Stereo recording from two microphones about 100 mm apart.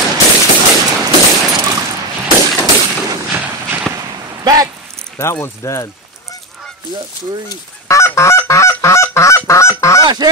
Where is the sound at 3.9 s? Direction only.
5° left (ahead or behind).